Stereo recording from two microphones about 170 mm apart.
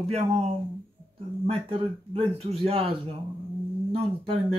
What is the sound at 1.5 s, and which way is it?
Speech, 35° right (ahead or behind).